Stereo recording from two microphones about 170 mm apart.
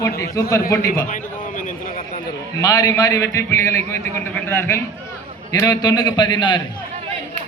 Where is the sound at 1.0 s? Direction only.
50° left (ahead or behind).